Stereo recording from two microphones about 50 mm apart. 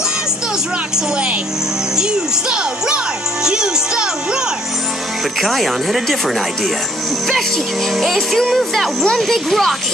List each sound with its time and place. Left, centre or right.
0.9 s speech: centre
2.5 s music: centre
5.4 s speech: centre